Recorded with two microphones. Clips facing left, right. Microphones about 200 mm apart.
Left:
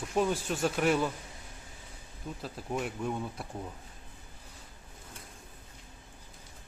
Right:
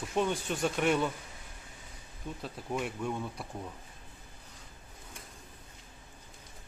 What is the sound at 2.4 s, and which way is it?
Speech, centre (ahead or behind).